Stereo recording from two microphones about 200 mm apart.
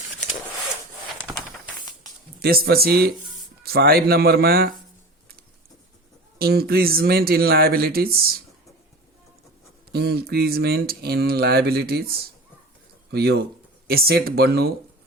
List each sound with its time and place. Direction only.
1.3 s a sound: 10° right (ahead or behind)
2.4 s speech: 50° right (ahead or behind)
6.4 s speech: 50° right (ahead or behind)
9.9 s speech: 55° right (ahead or behind)